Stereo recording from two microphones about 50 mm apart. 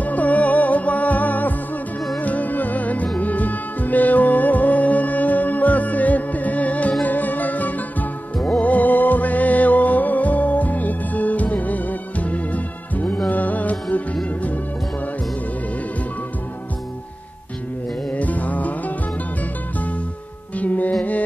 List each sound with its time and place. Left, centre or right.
0.0 s music: left
18.1 s music: left
20.5 s music: left